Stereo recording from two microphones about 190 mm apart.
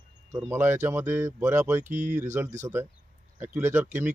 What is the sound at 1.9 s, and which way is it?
Speech, 40° right (ahead or behind).